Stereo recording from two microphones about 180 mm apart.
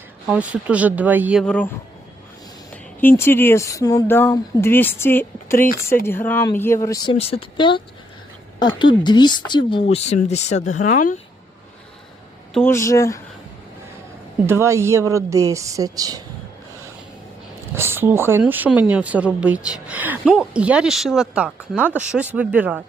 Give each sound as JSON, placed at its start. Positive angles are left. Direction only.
{"t": 0.3, "sound": "speech", "side_deg": -5}
{"t": 1.5, "sound": "speech", "side_deg": 5}
{"t": 3.0, "sound": "speech", "side_deg": 10}
{"t": 12.5, "sound": "speech", "side_deg": 15}
{"t": 14.4, "sound": "speech", "side_deg": -15}
{"t": 17.7, "sound": "speech", "side_deg": -10}